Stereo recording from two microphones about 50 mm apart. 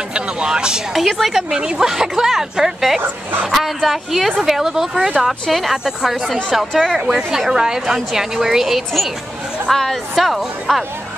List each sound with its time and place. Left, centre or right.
0.1 s vehicle: centre
0.9 s a woman's voice: centre
1.5 s a woman's voice: centre